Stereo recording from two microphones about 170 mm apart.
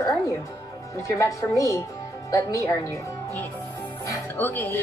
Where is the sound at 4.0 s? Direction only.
15° left (ahead or behind).